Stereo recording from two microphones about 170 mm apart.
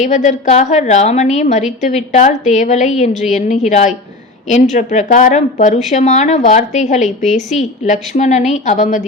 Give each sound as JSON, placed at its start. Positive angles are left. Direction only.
{"t": 0.0, "sound": "a woman's voice", "side_deg": 45}